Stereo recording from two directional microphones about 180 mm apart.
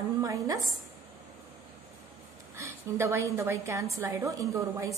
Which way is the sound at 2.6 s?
15° right (ahead or behind).